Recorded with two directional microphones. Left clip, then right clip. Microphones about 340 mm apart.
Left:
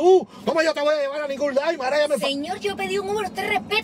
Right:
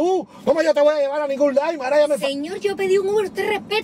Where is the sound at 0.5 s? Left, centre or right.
Centre.